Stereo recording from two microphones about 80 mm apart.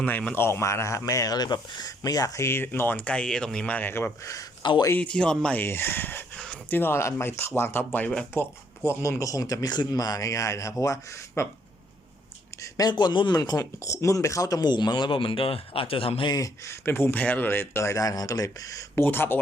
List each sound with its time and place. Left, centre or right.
0.0 s speech: centre
0.3 s speech: left
4.6 s speech: left
4.9 s speech: centre
5.5 s speech: left
6.3 s a sound: centre
6.7 s speech: left
8.3 s speech: left
12.7 s speech: left
16.1 s speech: left
16.8 s speech: left
18.9 s speech: left